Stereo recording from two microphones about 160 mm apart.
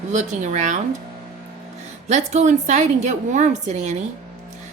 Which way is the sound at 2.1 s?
45° right (ahead or behind).